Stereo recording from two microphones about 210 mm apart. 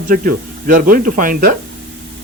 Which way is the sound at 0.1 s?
40° right (ahead or behind).